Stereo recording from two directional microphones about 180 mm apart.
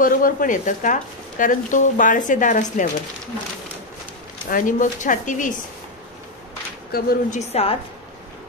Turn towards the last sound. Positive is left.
turn(degrees=35)  # may be behind; listen again after turning